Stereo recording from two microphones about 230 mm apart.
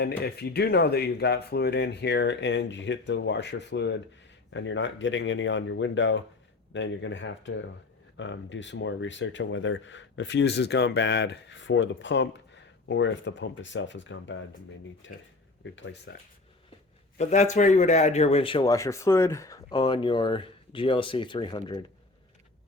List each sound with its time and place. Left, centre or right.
0.0 s speech: left
17.2 s speech: left